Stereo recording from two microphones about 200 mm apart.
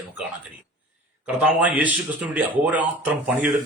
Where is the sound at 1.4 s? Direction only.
5° right (ahead or behind).